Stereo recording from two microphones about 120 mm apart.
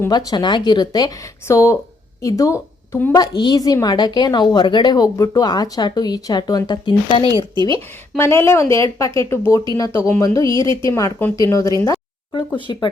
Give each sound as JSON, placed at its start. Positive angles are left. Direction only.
{"t": 0.1, "sound": "a woman's voice", "side_deg": 35}
{"t": 7.5, "sound": "speech", "side_deg": -40}
{"t": 8.1, "sound": "speech", "side_deg": 20}
{"t": 11.9, "sound": "a sound", "side_deg": 40}
{"t": 12.5, "sound": "speech", "side_deg": 40}